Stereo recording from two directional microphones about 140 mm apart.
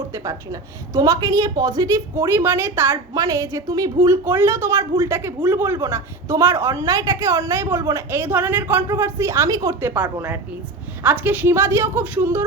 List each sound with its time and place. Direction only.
0.1 s a woman's voice: 20° right (ahead or behind)